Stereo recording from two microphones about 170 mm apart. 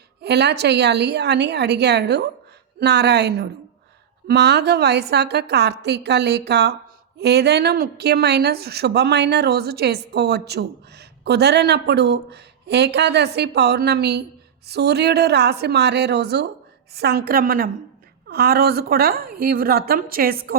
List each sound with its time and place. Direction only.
0.2 s a woman's voice: 75° right (ahead or behind); by 20.6 s 60° right (ahead or behind)